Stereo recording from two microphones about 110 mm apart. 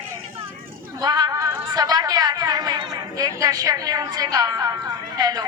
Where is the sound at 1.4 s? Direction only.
20° right (ahead or behind).